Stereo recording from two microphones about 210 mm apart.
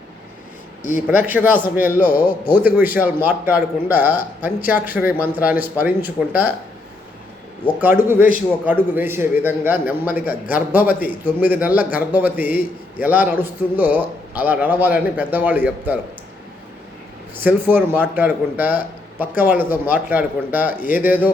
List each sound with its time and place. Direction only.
0.9 s a man's voice: 10° right (ahead or behind)
2.0 s a man's voice: 45° left (ahead or behind)
2.6 s a man's voice: 10° right (ahead or behind)
7.8 s a man's voice: 10° right (ahead or behind)
17.4 s a man's voice: 10° right (ahead or behind)